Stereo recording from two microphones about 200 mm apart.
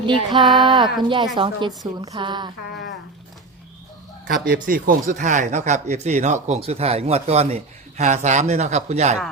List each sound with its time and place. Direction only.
0.0 s a woman's voice: 25° right (ahead or behind)
4.4 s speech: 45° right (ahead or behind)